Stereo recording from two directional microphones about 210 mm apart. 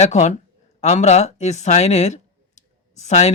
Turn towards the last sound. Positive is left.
turn(degrees=30)  # may be behind; listen again after turning